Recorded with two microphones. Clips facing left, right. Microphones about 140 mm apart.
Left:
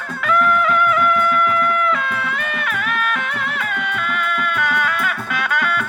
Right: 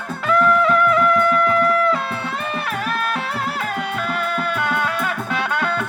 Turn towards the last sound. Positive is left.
turn(degrees=-30)  # may be behind; listen again after turning